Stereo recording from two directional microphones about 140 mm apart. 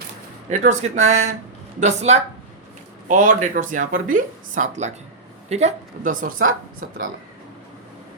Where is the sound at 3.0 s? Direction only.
65° right (ahead or behind).